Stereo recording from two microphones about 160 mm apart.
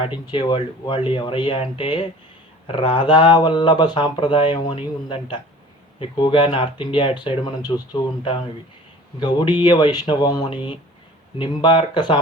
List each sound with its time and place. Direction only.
0.0 s speech: 30° left (ahead or behind)